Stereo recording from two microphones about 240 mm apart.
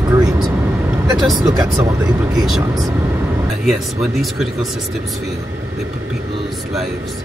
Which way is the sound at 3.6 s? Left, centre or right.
Centre.